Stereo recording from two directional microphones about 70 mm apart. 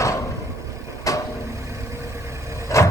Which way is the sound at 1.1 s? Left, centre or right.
Left.